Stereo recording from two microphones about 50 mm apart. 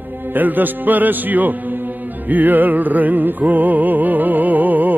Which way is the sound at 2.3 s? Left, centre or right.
Right.